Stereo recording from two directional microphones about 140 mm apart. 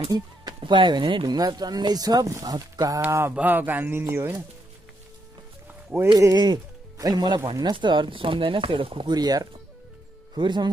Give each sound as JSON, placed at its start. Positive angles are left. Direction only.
{"t": 0.1, "sound": "speech", "side_deg": -30}
{"t": 3.0, "sound": "a sound", "side_deg": -15}
{"t": 6.1, "sound": "speech", "side_deg": -30}